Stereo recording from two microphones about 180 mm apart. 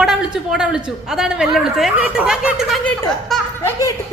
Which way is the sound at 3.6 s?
20° left (ahead or behind).